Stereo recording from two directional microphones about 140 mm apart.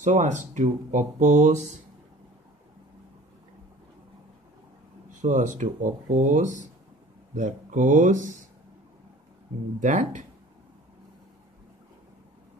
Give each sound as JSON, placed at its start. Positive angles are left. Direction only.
{"t": 0.0, "sound": "speech", "side_deg": -60}
{"t": 5.2, "sound": "speech", "side_deg": -60}
{"t": 9.8, "sound": "speech", "side_deg": -60}